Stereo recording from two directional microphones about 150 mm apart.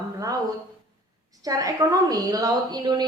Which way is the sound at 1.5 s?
25° right (ahead or behind).